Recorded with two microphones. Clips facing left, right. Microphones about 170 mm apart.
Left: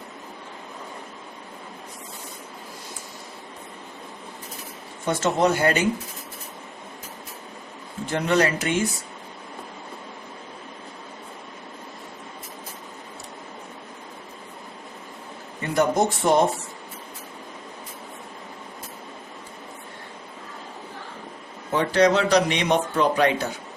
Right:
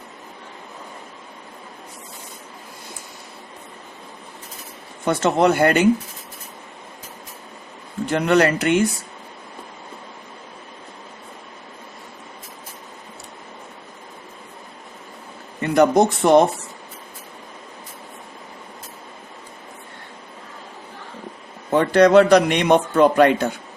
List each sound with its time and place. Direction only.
5.0 s speech: 60° right (ahead or behind)
8.1 s speech: 60° right (ahead or behind)
15.7 s speech: 60° right (ahead or behind)
21.7 s speech: 55° right (ahead or behind)